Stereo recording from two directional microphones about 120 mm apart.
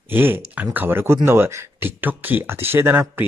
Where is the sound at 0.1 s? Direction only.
15° right (ahead or behind).